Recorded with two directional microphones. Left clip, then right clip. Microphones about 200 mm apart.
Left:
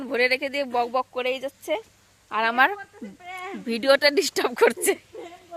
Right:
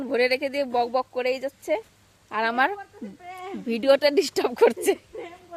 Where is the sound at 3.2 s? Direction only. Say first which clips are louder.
Left 2 dB; 20° left (ahead or behind).